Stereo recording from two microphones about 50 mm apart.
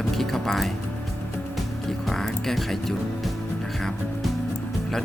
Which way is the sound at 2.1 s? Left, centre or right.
Centre.